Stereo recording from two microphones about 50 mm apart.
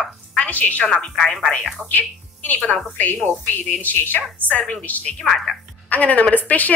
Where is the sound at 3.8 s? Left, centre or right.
Left.